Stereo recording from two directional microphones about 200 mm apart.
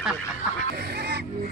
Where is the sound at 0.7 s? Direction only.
55° right (ahead or behind).